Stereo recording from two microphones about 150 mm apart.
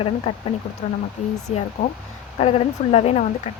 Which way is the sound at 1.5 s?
55° left (ahead or behind).